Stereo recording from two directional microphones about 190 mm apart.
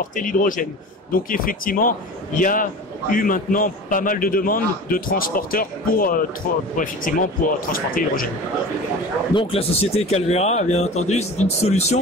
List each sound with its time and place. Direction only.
0.0 s a man's voice: 45° left (ahead or behind)
7.7 s a man's voice: 50° left (ahead or behind)
9.3 s speech: 30° left (ahead or behind)